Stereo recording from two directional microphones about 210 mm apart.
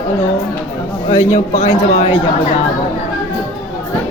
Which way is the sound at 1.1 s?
30° left (ahead or behind).